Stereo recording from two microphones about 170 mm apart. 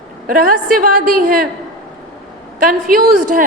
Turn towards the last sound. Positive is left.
turn(degrees=-55)  # may be behind; listen again after turning